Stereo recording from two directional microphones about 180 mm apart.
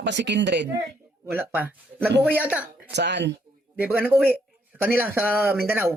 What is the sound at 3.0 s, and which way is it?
Speech, 75° right (ahead or behind).